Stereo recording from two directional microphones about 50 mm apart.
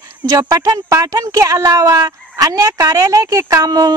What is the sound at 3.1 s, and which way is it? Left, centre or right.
Speech, right.